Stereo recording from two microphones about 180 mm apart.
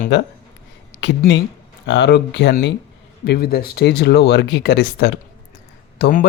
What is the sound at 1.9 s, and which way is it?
Speech, 75° left (ahead or behind).